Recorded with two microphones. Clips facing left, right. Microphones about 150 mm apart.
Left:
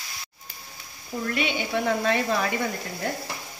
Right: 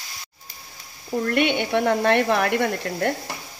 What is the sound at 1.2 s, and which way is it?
Speech, 60° right (ahead or behind).